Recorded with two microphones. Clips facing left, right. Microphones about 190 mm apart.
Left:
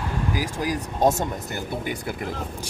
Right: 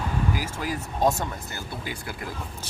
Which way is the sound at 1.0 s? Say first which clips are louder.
Left 3 dB; 20° left (ahead or behind).